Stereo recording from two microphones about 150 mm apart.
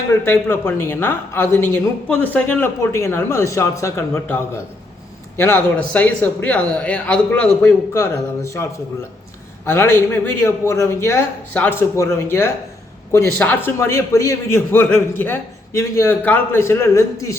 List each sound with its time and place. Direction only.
0.3 s speech: 15° left (ahead or behind)
9.6 s speech: 15° left (ahead or behind)